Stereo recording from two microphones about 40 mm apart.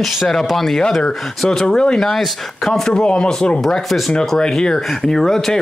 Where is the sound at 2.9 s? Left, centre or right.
Left.